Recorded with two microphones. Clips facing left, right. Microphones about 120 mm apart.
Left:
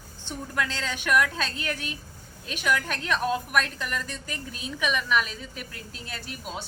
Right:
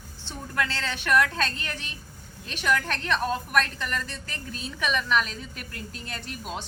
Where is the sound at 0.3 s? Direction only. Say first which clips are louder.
Even; 10° left (ahead or behind).